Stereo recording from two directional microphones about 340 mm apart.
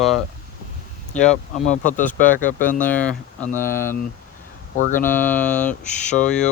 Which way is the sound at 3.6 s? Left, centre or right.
Centre.